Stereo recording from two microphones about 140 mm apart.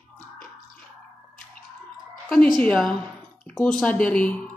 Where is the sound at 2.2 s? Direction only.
5° left (ahead or behind).